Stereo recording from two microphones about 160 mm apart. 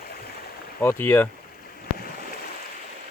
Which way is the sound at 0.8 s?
15° left (ahead or behind).